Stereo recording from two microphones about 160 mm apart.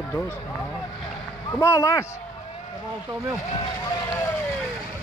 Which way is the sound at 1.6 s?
20° left (ahead or behind).